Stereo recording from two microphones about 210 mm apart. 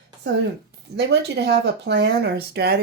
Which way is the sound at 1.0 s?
55° right (ahead or behind).